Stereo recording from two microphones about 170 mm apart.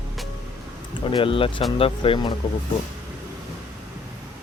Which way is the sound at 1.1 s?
30° left (ahead or behind).